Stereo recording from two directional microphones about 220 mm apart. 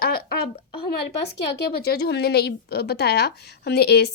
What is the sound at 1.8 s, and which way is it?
A woman's voice, 45° left (ahead or behind).